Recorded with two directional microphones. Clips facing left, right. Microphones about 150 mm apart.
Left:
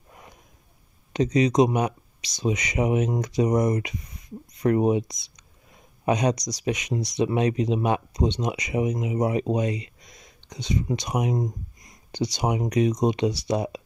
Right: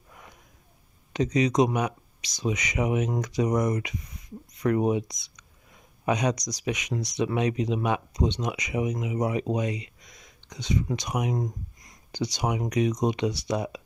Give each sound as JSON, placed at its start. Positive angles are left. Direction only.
{"t": 1.1, "sound": "speech", "side_deg": 30}